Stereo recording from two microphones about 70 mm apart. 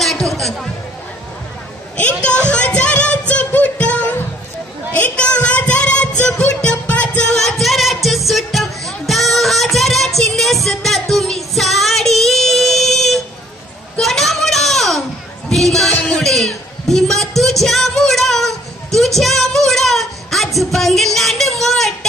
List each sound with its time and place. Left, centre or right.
0.0 s a sound: centre
2.0 s a man's voice: centre
2.5 s music: centre
4.9 s child singing: centre
6.2 s music: centre
7.3 s music: centre
13.9 s child singing: centre
15.5 s a sound: centre